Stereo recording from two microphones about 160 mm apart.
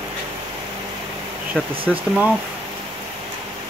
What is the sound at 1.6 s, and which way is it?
Speech, 10° left (ahead or behind).